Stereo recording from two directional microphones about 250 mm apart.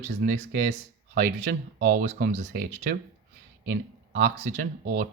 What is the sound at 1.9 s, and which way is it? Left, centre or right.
Speech, right.